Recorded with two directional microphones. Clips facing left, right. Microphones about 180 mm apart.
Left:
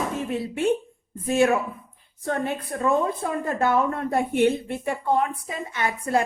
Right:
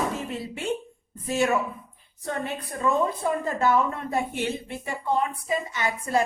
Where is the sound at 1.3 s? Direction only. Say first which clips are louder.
Left 4 dB; 55° left (ahead or behind).